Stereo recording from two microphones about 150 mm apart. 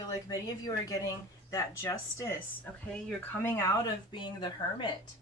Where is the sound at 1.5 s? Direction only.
20° left (ahead or behind).